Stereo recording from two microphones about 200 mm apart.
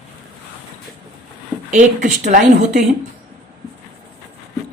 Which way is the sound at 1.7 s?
40° right (ahead or behind).